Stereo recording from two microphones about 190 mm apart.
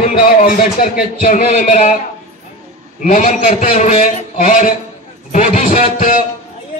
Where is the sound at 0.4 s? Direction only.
45° left (ahead or behind).